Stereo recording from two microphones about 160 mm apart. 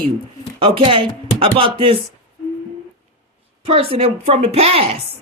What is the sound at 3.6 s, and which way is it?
Speech, 35° right (ahead or behind).